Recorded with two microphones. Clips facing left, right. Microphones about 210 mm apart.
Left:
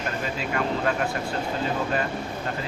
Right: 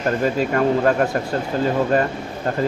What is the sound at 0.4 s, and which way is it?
Speech, 45° right (ahead or behind).